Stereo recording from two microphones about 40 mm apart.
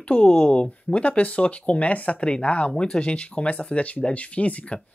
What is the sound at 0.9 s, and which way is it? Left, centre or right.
Speech, left.